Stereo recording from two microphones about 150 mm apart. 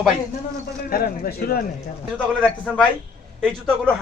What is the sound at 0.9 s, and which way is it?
Speech, 80° left.